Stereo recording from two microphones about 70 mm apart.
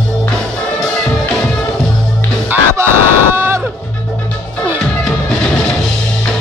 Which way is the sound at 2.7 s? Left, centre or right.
Right.